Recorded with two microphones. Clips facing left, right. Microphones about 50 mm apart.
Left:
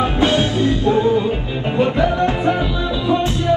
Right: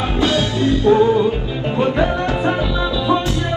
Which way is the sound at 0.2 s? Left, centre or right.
Left.